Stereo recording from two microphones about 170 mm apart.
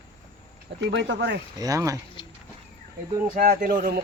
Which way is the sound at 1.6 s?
20° right (ahead or behind).